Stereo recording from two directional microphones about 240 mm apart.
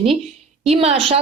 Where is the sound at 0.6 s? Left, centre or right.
Right.